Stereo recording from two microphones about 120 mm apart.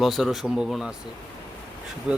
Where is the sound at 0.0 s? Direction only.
Centre (ahead or behind).